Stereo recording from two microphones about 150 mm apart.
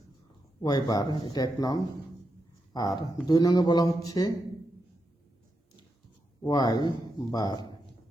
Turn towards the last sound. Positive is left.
turn(degrees=30)  # may be behind; listen again after turning